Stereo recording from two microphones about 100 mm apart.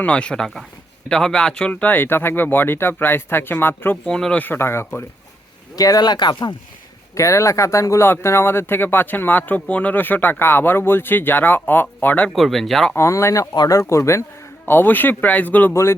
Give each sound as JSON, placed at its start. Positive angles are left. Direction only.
{"t": 0.0, "sound": "speech", "side_deg": 10}
{"t": 4.0, "sound": "speech", "side_deg": 10}
{"t": 5.7, "sound": "speech", "side_deg": 40}
{"t": 7.2, "sound": "speech", "side_deg": 30}
{"t": 12.3, "sound": "speech", "side_deg": 0}
{"t": 13.0, "sound": "speech", "side_deg": 30}
{"t": 15.7, "sound": "speech", "side_deg": 30}